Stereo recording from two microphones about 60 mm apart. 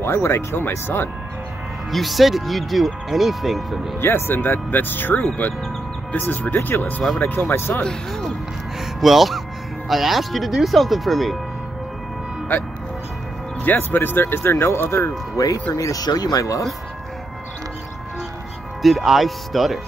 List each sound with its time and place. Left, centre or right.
0.0 s speech: left
1.9 s speech: centre
4.0 s speech: left
9.0 s speech: centre
13.7 s speech: left
15.3 s speech: left
18.8 s speech: centre